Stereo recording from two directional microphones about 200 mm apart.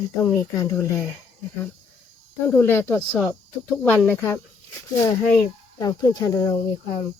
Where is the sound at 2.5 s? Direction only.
10° left (ahead or behind).